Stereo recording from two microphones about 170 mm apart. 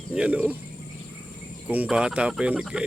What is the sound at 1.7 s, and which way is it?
Speech, 5° right (ahead or behind).